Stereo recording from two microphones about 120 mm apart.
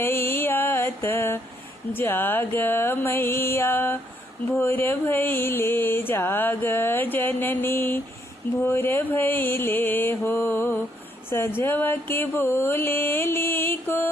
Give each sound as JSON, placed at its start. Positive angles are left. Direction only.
{"t": 0.0, "sound": "mantra", "side_deg": 20}
{"t": 2.0, "sound": "a sound", "side_deg": 15}
{"t": 11.3, "sound": "music", "side_deg": 20}